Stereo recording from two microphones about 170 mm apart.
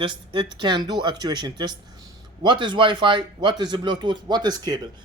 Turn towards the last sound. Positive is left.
turn(degrees=-25)  # may be behind; listen again after turning